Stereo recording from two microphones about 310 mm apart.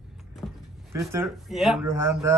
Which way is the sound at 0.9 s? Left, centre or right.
Centre.